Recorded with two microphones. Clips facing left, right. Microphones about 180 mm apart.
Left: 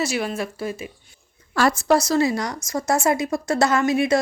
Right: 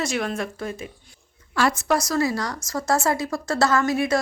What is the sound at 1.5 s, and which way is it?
A woman's voice, 40° left (ahead or behind).